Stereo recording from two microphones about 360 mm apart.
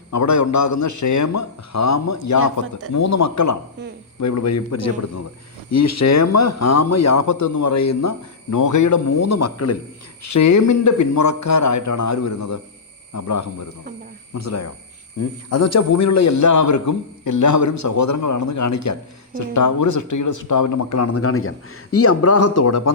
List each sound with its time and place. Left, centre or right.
0.1 s speech: left